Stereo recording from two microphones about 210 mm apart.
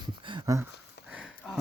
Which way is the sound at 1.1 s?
5° right (ahead or behind).